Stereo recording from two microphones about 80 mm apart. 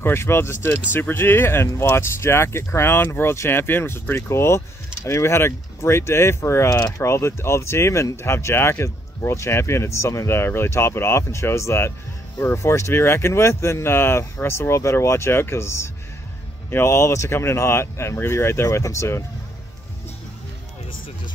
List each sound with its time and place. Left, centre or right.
0.0 s speech: left